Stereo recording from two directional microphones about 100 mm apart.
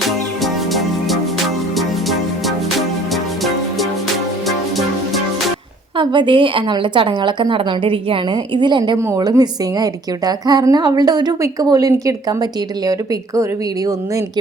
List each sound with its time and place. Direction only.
0.4 s music: centre (ahead or behind)
6.0 s a woman's voice: 50° right (ahead or behind); by 13.9 s 35° right (ahead or behind)